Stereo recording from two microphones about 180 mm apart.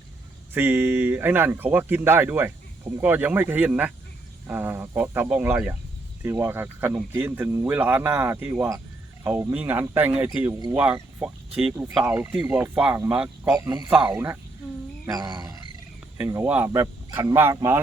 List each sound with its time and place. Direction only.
0.5 s speech: 10° right (ahead or behind)
13.7 s speech: 20° right (ahead or behind)
15.0 s wild animals: 20° right (ahead or behind)
16.1 s speech: 10° right (ahead or behind)